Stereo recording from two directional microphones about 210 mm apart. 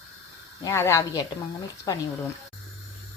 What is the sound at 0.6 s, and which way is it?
A woman's voice, 10° left (ahead or behind).